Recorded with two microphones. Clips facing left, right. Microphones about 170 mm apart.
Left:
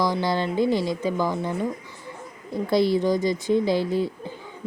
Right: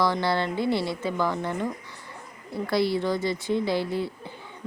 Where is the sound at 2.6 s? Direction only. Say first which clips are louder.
Left 4 dB; 20° left (ahead or behind).